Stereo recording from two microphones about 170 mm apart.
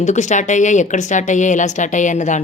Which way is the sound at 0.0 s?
45° left (ahead or behind).